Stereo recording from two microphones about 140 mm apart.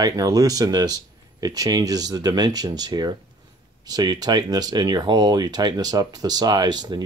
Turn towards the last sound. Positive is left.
turn(degrees=-30)  # may be behind; listen again after turning